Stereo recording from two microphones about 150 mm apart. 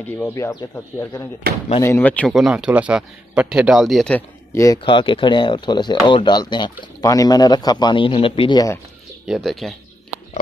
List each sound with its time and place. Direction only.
0.1 s speech: 15° left (ahead or behind)
1.5 s speech: 90° right
1.8 s speech: 15° left (ahead or behind)
2.3 s speech: 5° right (ahead or behind)
4.5 s speech: 20° left (ahead or behind)
4.8 s speech: 35° left (ahead or behind)
9.3 s speech: centre (ahead or behind)